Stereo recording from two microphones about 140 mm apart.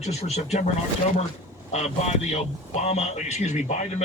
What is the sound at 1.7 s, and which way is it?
A man's voice, 50° left (ahead or behind).